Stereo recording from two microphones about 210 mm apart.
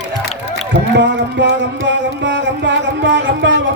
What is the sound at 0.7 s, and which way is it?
Music, 55° right (ahead or behind).